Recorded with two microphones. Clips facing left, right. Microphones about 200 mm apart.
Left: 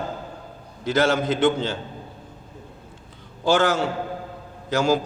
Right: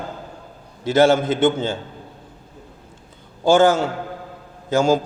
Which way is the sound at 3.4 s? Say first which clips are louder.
Right 5 dB; 50° right (ahead or behind).